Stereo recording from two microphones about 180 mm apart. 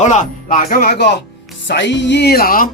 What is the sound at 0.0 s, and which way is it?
Speech, 40° left (ahead or behind).